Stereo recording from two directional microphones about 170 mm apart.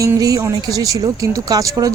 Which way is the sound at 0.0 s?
20° right (ahead or behind).